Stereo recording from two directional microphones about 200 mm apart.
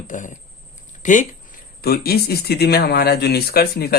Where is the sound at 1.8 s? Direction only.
50° left (ahead or behind).